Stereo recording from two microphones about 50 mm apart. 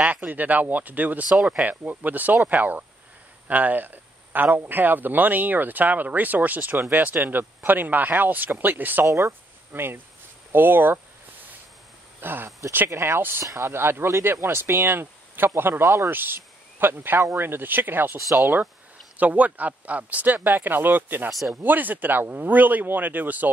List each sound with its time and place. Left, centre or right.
0.3 s speech: right
1.3 s speech: centre
2.0 s speech: right
9.0 s speech: right
9.7 s speech: right
12.2 s speech: right
12.4 s speech: right
12.9 s speech: right
21.3 s speech: centre
21.6 s speech: right